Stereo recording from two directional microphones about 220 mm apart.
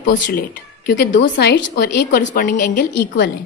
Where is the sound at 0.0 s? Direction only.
55° left (ahead or behind).